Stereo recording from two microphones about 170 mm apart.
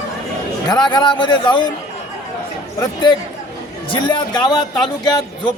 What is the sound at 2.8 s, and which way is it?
Speech, 25° left (ahead or behind).